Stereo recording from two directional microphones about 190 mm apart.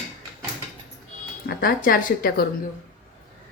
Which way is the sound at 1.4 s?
50° left (ahead or behind).